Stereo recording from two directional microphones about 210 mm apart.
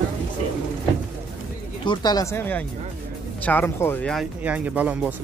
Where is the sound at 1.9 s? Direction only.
20° left (ahead or behind).